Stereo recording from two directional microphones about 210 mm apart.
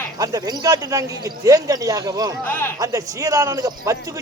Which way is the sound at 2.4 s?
10° left (ahead or behind).